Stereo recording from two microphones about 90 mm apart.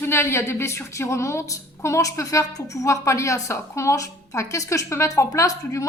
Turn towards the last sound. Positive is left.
turn(degrees=35)  # may be behind; listen again after turning